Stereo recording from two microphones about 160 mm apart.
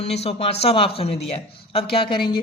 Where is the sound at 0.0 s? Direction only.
40° left (ahead or behind).